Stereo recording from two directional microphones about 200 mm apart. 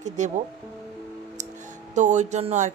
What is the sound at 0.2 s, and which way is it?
Speech, 35° right (ahead or behind).